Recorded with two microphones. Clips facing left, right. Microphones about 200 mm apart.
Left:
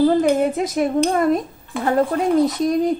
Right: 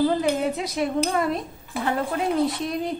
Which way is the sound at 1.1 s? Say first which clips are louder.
Left 6 dB; 50° left (ahead or behind).